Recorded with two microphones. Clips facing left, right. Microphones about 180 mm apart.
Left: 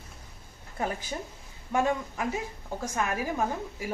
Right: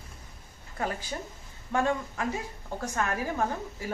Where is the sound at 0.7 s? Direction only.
20° left (ahead or behind).